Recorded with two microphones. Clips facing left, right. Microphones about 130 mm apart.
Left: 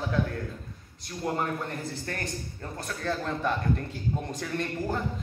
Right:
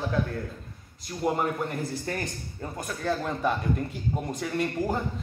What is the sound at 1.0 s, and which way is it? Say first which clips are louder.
A man's voice: right 3 dB; 15° right (ahead or behind).